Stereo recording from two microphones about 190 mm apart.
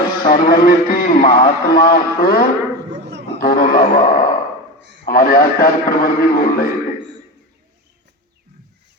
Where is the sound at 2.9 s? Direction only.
65° right (ahead or behind).